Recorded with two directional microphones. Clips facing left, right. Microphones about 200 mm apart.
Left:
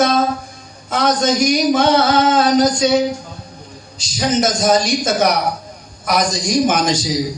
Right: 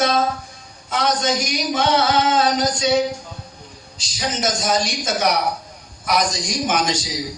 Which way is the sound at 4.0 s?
40° left (ahead or behind).